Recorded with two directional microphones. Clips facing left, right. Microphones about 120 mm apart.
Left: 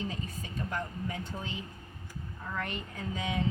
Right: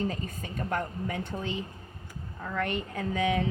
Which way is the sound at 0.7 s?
60° right (ahead or behind).